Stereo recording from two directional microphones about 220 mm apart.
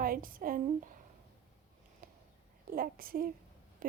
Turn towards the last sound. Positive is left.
turn(degrees=-40)  # may be behind; listen again after turning